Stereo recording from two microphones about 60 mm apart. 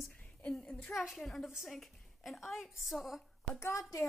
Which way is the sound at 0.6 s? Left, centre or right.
Left.